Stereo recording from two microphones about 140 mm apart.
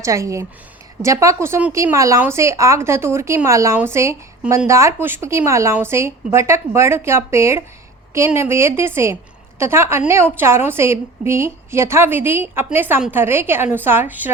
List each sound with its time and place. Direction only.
0.0 s a woman's voice: 20° right (ahead or behind)